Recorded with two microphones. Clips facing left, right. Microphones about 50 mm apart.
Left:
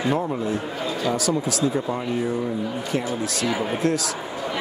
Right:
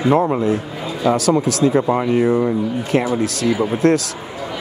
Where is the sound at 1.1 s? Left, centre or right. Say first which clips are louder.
Right 7 dB; right.